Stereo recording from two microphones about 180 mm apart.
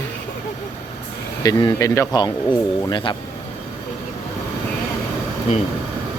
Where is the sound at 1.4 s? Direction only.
25° left (ahead or behind).